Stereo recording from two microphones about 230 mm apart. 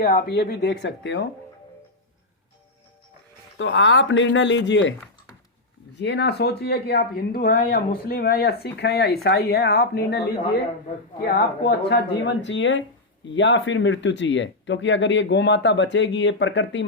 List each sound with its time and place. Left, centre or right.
0.0 s speech: left
3.6 s speech: left
6.0 s speech: left
11.2 s speech: left